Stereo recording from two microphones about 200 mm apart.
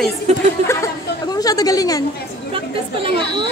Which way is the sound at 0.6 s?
15° left (ahead or behind).